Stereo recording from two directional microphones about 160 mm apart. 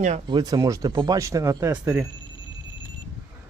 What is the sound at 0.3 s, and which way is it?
Speech, 25° right (ahead or behind).